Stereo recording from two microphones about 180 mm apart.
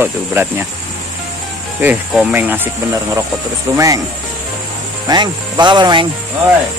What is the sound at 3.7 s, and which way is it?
Speech, 20° right (ahead or behind).